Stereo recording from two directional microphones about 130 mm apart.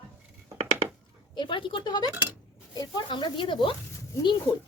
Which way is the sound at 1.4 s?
40° left (ahead or behind).